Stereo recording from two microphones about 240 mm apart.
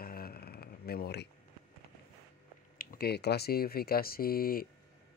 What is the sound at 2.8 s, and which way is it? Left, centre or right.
Speech, left.